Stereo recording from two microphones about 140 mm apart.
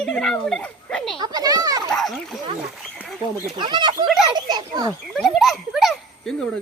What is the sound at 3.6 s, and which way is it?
Speech, 35° right (ahead or behind).